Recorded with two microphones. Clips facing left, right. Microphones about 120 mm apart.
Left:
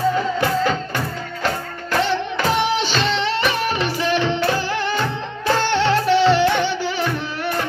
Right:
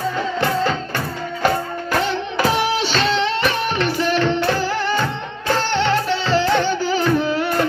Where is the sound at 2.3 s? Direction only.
5° right (ahead or behind).